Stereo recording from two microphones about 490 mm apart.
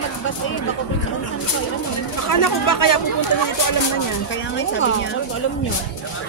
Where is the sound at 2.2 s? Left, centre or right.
Left.